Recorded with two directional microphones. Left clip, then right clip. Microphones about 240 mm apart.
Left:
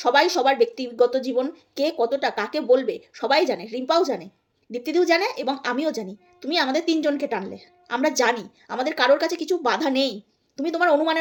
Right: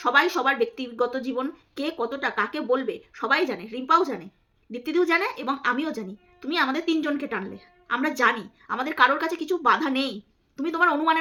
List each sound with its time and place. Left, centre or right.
0.0 s a woman's voice: centre